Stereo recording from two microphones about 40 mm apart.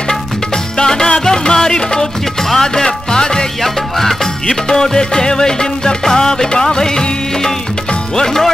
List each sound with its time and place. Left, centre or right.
0.7 s music: centre